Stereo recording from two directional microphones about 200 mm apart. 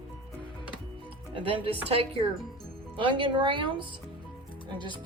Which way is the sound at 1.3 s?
25° right (ahead or behind).